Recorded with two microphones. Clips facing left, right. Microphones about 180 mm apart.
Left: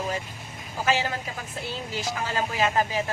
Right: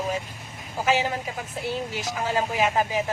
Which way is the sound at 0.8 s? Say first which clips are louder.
Right 2 dB; 15° right (ahead or behind).